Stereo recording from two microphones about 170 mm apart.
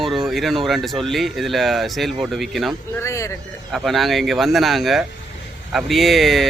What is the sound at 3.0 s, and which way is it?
Speech, 15° left (ahead or behind).